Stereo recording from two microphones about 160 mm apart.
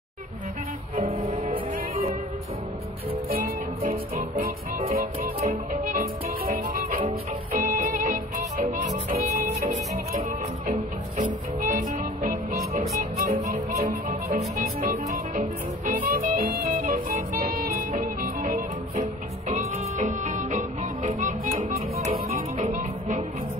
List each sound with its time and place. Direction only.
0.9 s music: 45° right (ahead or behind)
3.3 s music: 65° right (ahead or behind)
11.6 s music: 55° right (ahead or behind)
19.5 s music: 45° right (ahead or behind)
21.9 s music: 45° right (ahead or behind)